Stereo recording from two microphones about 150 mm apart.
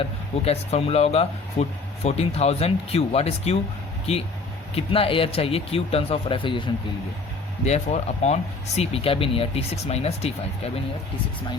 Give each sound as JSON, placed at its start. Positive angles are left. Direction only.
{"t": 0.0, "sound": "speech", "side_deg": 45}
{"t": 4.7, "sound": "speech", "side_deg": 40}
{"t": 7.6, "sound": "speech", "side_deg": 45}